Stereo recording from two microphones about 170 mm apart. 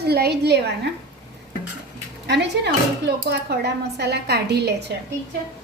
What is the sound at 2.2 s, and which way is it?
A woman's voice, 85° right.